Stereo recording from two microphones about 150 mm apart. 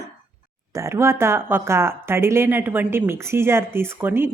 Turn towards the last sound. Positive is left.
turn(degrees=-15)  # may be behind; listen again after turning